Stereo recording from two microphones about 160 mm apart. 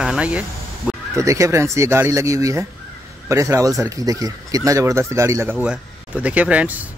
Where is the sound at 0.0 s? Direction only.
5° right (ahead or behind).